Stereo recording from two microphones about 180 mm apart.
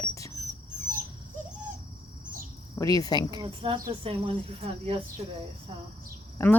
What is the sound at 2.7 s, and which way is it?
Cricket, 20° left (ahead or behind).